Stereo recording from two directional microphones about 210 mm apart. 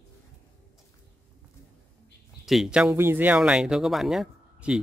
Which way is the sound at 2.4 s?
Centre (ahead or behind).